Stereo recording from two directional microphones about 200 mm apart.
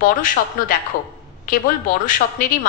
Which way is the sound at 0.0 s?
45° left (ahead or behind).